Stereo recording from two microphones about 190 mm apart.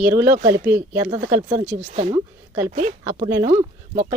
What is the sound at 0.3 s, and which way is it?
Speech, 50° right (ahead or behind).